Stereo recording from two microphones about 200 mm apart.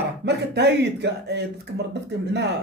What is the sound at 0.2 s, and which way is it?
A man's voice, 55° right (ahead or behind).